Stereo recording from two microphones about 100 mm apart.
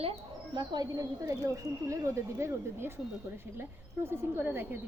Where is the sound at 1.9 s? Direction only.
30° right (ahead or behind).